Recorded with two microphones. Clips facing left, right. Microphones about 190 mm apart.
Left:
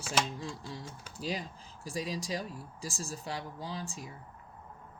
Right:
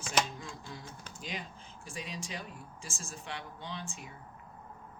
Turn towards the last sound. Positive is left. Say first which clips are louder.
# left 3 dB
turn(degrees=35)  # may be behind; listen again after turning